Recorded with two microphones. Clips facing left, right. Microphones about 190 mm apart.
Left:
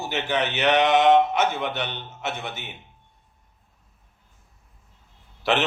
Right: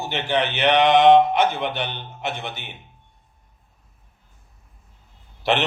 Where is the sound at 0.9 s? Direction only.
15° right (ahead or behind).